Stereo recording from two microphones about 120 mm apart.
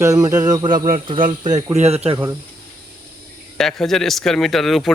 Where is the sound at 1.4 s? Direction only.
80° right; by 2.1 s 60° right (ahead or behind).